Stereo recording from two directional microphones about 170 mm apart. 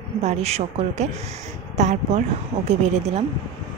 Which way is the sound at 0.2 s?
40° right (ahead or behind).